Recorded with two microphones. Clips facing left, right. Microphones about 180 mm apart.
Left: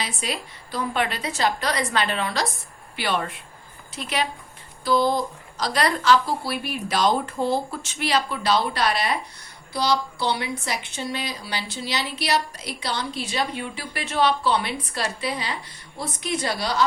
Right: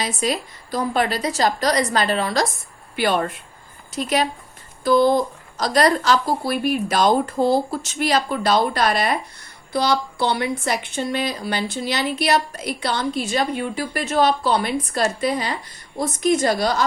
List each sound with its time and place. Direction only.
0.0 s a woman's voice: 40° right (ahead or behind)
4.8 s a woman's voice: 50° right (ahead or behind)